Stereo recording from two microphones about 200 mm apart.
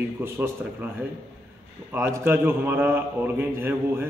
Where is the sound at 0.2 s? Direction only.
10° right (ahead or behind).